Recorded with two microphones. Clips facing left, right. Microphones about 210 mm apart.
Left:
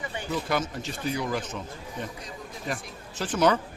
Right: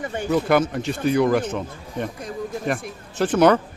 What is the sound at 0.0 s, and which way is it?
Speech, 50° right (ahead or behind).